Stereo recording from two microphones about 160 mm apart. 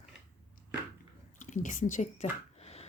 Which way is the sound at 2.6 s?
40° left (ahead or behind).